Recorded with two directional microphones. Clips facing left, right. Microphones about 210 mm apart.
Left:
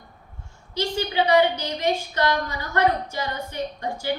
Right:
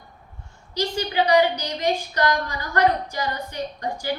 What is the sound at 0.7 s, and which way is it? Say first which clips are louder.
A woman's voice: even; 25° left (ahead or behind).